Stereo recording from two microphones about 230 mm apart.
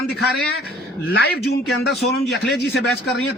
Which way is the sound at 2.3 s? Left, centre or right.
Left.